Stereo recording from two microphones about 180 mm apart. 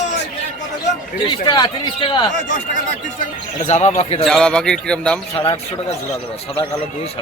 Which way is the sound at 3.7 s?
40° left (ahead or behind).